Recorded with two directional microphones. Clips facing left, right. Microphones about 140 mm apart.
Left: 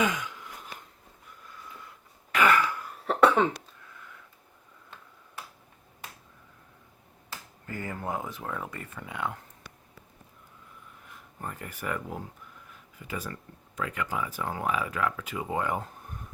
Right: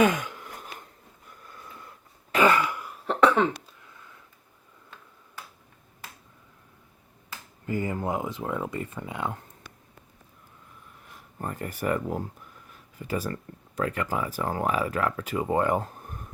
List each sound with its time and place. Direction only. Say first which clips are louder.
0.0 s a sound: right 6 dB; 55° right (ahead or behind)
2.3 s throat clearing: right 2 dB; 25° right (ahead or behind)
3.1 s cough: right 1 dB; 10° left (ahead or behind)
7.7 s speech: right 6 dB; 20° right (ahead or behind)
11.3 s speech: right 6 dB; 40° right (ahead or behind)